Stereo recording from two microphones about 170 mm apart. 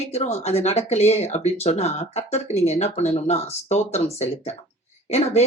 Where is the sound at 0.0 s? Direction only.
40° left (ahead or behind).